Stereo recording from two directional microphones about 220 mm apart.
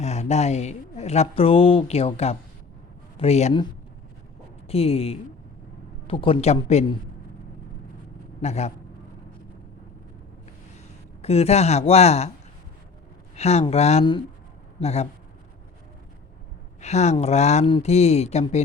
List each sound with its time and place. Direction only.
0.0 s a woman's voice: 30° left (ahead or behind)
8.4 s a woman's voice: 30° left (ahead or behind)
11.2 s a woman's voice: 30° left (ahead or behind)
13.3 s a woman's voice: 30° left (ahead or behind)
16.8 s a woman's voice: 30° left (ahead or behind)